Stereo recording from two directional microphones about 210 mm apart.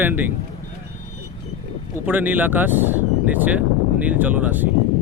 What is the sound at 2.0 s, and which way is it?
Speech, 10° right (ahead or behind).